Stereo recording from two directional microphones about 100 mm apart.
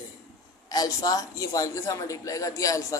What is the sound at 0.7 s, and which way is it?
A man's voice, 40° left (ahead or behind).